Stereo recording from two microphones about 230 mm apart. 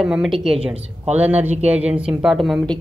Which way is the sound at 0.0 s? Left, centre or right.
Centre.